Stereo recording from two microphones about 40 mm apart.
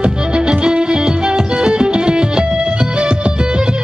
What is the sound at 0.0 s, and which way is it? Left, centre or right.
Music, right.